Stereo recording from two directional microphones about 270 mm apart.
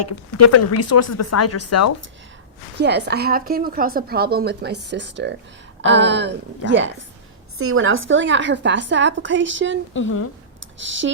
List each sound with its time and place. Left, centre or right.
0.0 s speech: left
2.7 s a woman's voice: right
9.9 s speech: left
10.8 s a woman's voice: right